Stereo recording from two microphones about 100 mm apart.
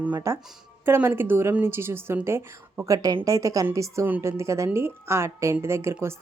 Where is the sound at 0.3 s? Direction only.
30° right (ahead or behind).